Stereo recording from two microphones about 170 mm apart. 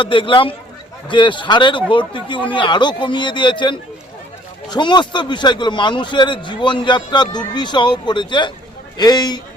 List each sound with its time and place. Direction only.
0.0 s a man's voice: 30° left (ahead or behind)